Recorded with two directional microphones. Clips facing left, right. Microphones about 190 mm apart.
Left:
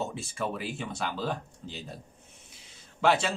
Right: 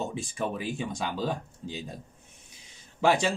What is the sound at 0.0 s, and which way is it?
Speech, 15° right (ahead or behind).